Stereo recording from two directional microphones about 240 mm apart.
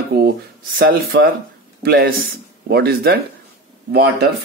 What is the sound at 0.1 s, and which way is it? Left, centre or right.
Speech, right.